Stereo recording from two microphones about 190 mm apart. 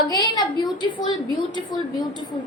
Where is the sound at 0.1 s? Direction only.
20° left (ahead or behind).